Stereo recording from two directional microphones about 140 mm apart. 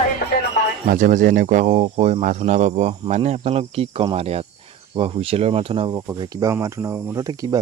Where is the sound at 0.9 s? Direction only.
70° right (ahead or behind); by 6.0 s 40° right (ahead or behind).